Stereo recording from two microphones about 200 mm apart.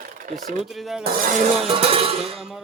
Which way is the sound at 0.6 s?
Centre (ahead or behind).